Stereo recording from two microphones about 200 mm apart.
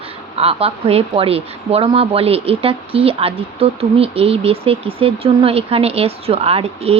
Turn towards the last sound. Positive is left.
turn(degrees=-30)  # may be behind; listen again after turning